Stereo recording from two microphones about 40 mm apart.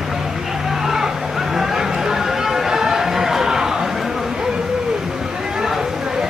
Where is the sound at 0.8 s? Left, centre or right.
Centre.